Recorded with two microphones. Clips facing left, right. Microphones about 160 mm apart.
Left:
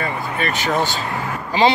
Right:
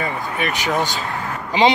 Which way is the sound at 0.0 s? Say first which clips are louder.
Even; 15° right (ahead or behind).